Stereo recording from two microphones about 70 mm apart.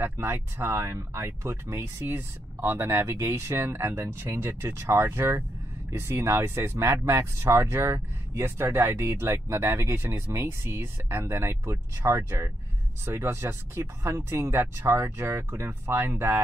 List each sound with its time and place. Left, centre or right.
0.0 s speech: right